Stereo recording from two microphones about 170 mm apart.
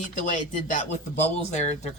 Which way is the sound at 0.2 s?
45° left (ahead or behind).